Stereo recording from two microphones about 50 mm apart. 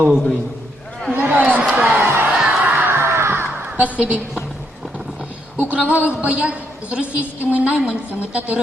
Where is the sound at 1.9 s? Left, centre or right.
Right.